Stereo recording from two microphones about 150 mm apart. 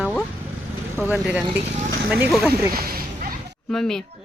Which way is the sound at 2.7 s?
85° right.